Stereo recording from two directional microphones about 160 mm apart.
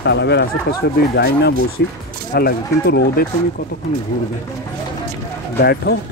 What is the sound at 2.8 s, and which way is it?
Speech, 90° left.